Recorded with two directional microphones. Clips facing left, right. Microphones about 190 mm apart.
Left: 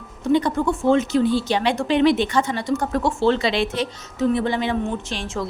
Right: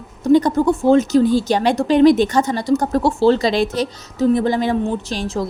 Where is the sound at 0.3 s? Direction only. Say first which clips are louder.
Right 5 dB; 40° right (ahead or behind).